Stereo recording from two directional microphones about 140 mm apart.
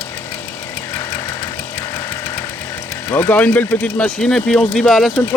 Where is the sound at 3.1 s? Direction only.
10° left (ahead or behind).